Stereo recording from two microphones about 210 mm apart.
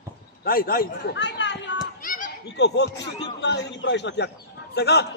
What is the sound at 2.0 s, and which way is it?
Speech, 40° left (ahead or behind).